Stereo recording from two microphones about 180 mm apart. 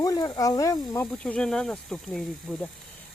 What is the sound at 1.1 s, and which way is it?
Speech, 5° left (ahead or behind).